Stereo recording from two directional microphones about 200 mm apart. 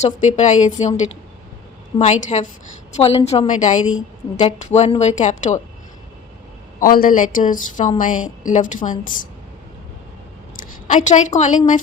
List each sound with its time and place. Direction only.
0.0 s a woman's voice: 35° left (ahead or behind)
2.3 s a woman's voice: 30° left (ahead or behind)
6.7 s a woman's voice: 45° left (ahead or behind)
8.8 s a woman's voice: 25° left (ahead or behind)
10.6 s a woman's voice: 40° left (ahead or behind)